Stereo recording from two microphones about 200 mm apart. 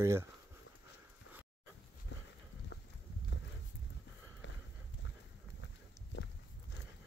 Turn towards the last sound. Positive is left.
turn(degrees=75)  # may be behind; listen again after turning